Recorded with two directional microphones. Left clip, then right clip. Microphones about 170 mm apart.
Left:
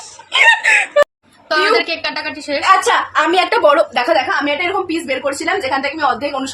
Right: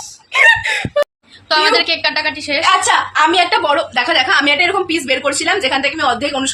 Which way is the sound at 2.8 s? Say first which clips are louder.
Right 1 dB; 70° left (ahead or behind).